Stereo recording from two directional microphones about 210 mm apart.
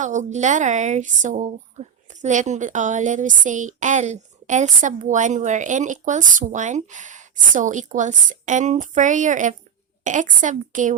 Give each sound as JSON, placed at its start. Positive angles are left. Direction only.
{"t": 0.0, "sound": "speech", "side_deg": -35}